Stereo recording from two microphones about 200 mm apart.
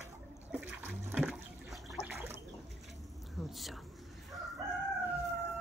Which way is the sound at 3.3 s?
Centre (ahead or behind).